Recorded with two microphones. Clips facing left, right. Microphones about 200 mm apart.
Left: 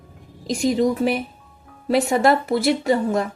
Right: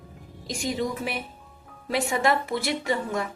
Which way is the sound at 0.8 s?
40° left (ahead or behind).